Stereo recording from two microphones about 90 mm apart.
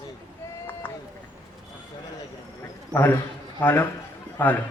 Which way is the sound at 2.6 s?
25° left (ahead or behind).